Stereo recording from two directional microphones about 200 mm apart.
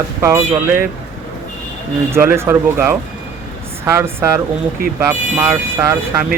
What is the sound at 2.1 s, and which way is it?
A man's voice, 10° right (ahead or behind).